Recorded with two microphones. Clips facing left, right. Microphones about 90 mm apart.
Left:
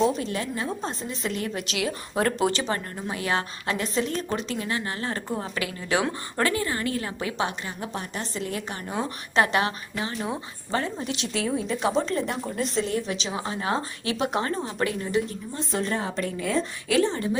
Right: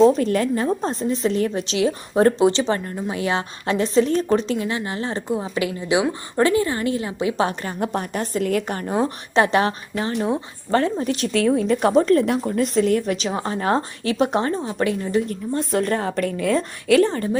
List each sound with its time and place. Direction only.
0.2 s a woman's voice: 50° right (ahead or behind); by 4.5 s 35° right (ahead or behind)
4.5 s a woman's voice: 25° right (ahead or behind)
7.3 s a woman's voice: 40° right (ahead or behind)
7.9 s speech: 50° right (ahead or behind)
10.2 s a woman's voice: 25° right (ahead or behind)
10.7 s a woman's voice: 65° right (ahead or behind)
11.0 s speech: 45° right (ahead or behind)
11.3 s a woman's voice: 60° right (ahead or behind); by 15.2 s 30° right (ahead or behind)
15.3 s a woman's voice: 55° right (ahead or behind)